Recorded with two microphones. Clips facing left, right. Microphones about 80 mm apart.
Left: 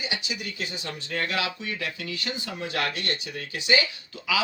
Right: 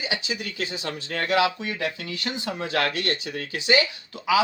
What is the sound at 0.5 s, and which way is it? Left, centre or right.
Speech, right.